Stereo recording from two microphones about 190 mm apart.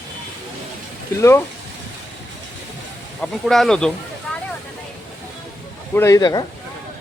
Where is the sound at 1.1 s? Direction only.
15° left (ahead or behind).